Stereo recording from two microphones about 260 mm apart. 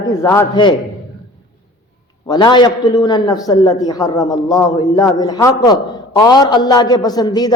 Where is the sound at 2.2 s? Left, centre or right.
Centre.